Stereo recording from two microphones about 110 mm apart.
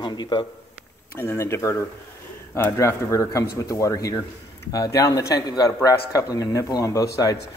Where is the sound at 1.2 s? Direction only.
25° left (ahead or behind).